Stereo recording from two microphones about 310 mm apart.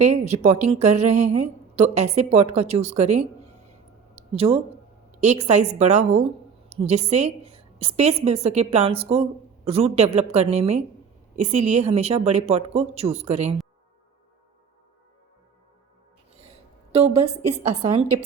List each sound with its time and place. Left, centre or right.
0.0 s a woman's voice: right
16.4 s a sound: centre
17.6 s a woman's voice: right